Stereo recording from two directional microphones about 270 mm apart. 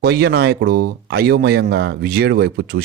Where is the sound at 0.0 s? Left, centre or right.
Right.